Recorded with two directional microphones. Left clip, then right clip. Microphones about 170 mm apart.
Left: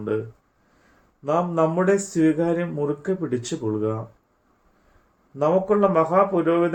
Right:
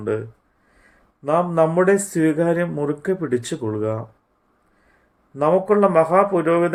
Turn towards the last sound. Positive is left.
turn(degrees=-50)  # may be behind; listen again after turning